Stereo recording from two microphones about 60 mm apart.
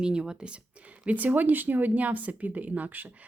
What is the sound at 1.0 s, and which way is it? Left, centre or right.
Speech, right.